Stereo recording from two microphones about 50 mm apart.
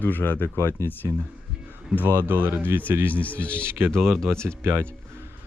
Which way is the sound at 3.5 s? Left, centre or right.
Right.